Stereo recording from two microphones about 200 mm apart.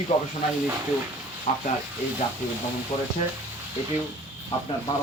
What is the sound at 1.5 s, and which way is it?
Speech, 40° left (ahead or behind).